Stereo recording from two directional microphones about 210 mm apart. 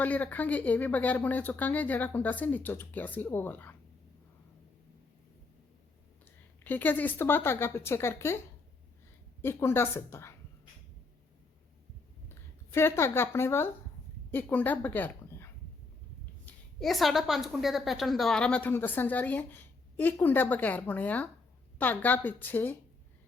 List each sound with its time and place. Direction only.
0.0 s a woman's voice: 10° left (ahead or behind)
6.7 s a woman's voice: 10° left (ahead or behind)
9.4 s a woman's voice: 10° left (ahead or behind)
12.3 s a woman's voice: 10° left (ahead or behind)
16.5 s a woman's voice: centre (ahead or behind)